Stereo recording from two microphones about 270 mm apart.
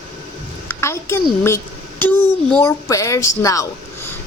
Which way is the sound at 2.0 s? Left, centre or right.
Centre.